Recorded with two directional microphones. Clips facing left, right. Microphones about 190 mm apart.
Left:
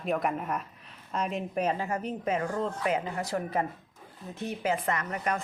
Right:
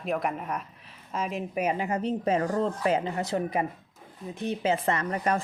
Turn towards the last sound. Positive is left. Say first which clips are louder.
# right 4 dB
turn(degrees=-30)  # may be behind; listen again after turning